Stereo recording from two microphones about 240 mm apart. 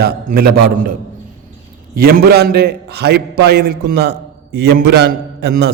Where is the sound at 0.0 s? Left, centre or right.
Right.